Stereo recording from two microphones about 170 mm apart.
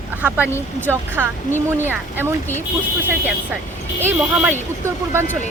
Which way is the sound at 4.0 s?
10° right (ahead or behind).